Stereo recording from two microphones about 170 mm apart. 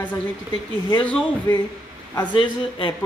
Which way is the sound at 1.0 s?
10° left (ahead or behind).